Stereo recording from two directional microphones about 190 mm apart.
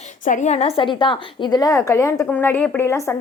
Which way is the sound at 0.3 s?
35° left (ahead or behind).